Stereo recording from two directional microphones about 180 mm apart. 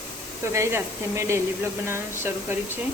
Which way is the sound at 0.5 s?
15° right (ahead or behind).